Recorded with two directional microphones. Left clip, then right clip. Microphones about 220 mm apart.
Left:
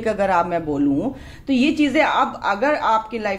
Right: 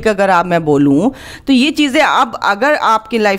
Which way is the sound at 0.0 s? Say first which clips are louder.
Right 7 dB; 40° right (ahead or behind).